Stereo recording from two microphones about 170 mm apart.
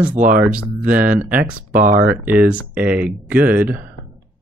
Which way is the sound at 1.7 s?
50° right (ahead or behind).